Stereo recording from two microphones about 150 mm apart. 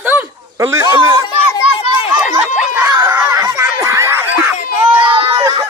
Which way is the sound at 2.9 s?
20° right (ahead or behind).